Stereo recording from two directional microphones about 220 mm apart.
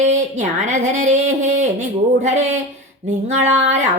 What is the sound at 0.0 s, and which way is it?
A woman's voice, 35° right (ahead or behind).